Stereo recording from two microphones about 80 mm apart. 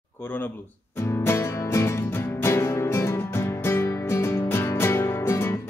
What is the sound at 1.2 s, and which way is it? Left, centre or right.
Music, left.